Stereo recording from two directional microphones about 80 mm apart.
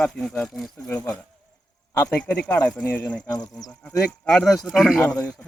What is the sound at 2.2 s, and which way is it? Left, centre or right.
Speech, centre.